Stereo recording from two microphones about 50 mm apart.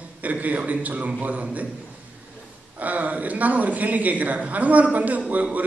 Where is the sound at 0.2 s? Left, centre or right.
Right.